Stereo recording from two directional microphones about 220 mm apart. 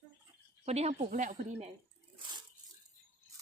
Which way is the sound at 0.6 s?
30° right (ahead or behind).